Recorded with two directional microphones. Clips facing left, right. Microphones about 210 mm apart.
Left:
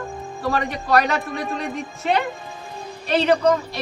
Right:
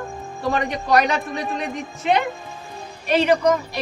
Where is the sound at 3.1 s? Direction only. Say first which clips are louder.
Even; 15° right (ahead or behind).